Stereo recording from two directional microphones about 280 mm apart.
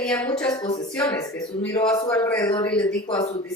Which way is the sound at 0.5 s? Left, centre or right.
Centre.